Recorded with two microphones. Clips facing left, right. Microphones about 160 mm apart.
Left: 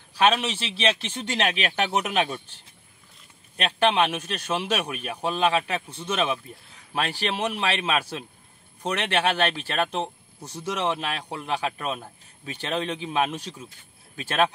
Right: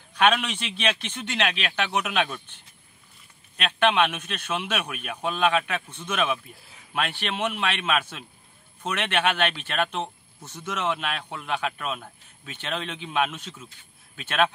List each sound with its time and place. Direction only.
0.1 s a man's voice: 35° left (ahead or behind)
3.5 s a man's voice: 35° left (ahead or behind)